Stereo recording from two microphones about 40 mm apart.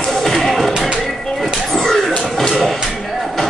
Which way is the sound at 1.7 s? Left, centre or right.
Centre.